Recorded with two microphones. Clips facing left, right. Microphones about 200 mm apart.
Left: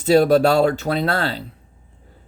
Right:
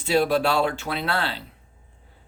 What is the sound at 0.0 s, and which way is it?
Speech, 40° left (ahead or behind).